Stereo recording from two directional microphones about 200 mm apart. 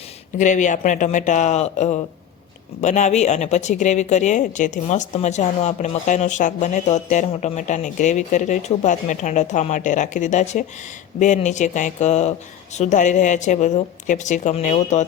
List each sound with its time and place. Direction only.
0.3 s speech: 40° left (ahead or behind)